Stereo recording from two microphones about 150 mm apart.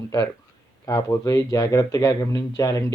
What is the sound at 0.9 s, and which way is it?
Speech, 20° left (ahead or behind).